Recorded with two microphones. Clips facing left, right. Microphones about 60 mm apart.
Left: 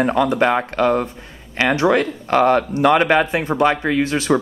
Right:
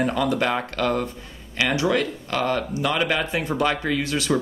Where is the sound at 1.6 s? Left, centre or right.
Left.